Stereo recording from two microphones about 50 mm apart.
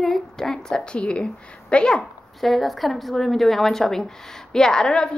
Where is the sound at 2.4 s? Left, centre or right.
Centre.